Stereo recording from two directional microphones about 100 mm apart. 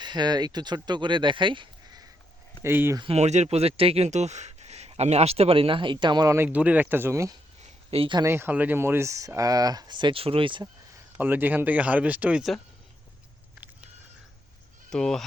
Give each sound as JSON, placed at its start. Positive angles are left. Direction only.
{"t": 0.0, "sound": "speech", "side_deg": -45}
{"t": 2.6, "sound": "speech", "side_deg": -25}
{"t": 3.1, "sound": "speech", "side_deg": -90}
{"t": 6.2, "sound": "speech", "side_deg": -25}
{"t": 6.5, "sound": "speech", "side_deg": -15}
{"t": 7.9, "sound": "speech", "side_deg": -75}
{"t": 8.2, "sound": "speech", "side_deg": -25}
{"t": 11.2, "sound": "speech", "side_deg": -20}
{"t": 14.8, "sound": "speech", "side_deg": 5}